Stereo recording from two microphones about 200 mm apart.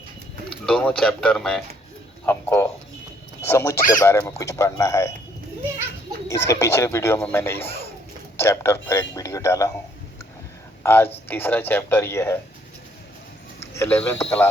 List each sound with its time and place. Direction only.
0.5 s speech: 5° left (ahead or behind)
6.2 s speech: 15° left (ahead or behind)
10.8 s speech: 10° left (ahead or behind)
13.7 s speech: 10° left (ahead or behind)